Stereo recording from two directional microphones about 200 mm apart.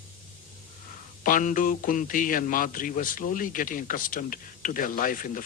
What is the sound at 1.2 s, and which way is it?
A man's voice, 40° left (ahead or behind).